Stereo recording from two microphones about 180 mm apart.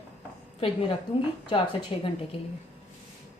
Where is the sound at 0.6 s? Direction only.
30° left (ahead or behind).